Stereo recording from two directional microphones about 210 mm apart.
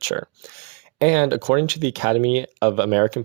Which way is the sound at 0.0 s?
45° right (ahead or behind).